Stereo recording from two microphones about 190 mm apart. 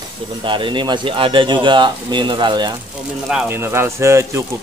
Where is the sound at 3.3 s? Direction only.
5° right (ahead or behind).